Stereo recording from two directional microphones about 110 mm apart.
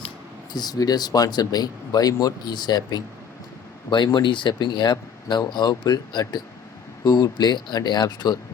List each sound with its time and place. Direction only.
0.5 s speech: 35° left (ahead or behind)